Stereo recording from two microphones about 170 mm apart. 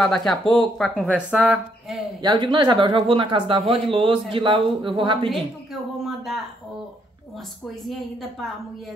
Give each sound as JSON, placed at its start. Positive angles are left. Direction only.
{"t": 0.0, "sound": "speech", "side_deg": 5}
{"t": 2.2, "sound": "speech", "side_deg": -25}
{"t": 5.3, "sound": "a sound", "side_deg": 0}
{"t": 7.6, "sound": "speech", "side_deg": 0}